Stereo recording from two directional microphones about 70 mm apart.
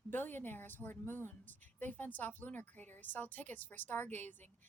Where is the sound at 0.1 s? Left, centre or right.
Left.